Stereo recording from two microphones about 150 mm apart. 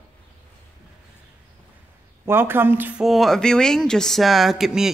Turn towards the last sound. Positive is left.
turn(degrees=-5)  # may be behind; listen again after turning